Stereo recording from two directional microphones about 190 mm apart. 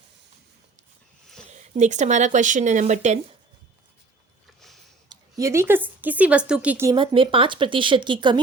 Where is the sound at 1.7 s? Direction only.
40° right (ahead or behind).